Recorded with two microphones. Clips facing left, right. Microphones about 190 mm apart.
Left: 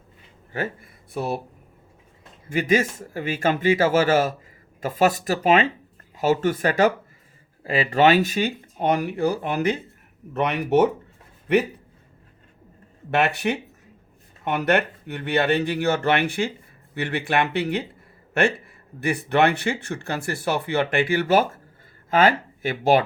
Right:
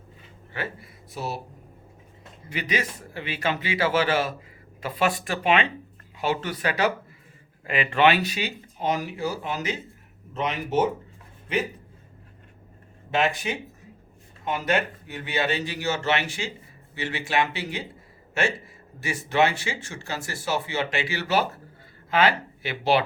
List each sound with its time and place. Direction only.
0.5 s speech: 45° left (ahead or behind)
2.5 s a man's voice: 45° left (ahead or behind)
7.6 s speech: 35° left (ahead or behind); by 11.6 s 65° left (ahead or behind)
13.1 s a man's voice: 65° left (ahead or behind); by 23.0 s 45° left (ahead or behind)